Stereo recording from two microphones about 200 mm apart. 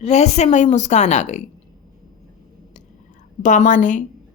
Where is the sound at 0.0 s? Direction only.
35° left (ahead or behind).